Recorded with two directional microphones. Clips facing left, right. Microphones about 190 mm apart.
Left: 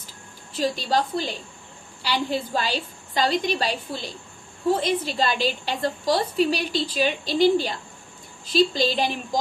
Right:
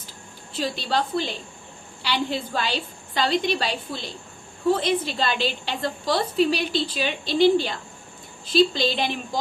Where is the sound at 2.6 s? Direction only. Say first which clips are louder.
Even; 40° left (ahead or behind).